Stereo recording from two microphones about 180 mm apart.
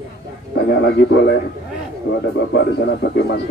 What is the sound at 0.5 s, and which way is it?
Speech, 65° left (ahead or behind).